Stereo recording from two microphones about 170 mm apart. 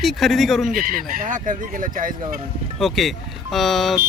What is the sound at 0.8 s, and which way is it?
Speech, 55° right (ahead or behind).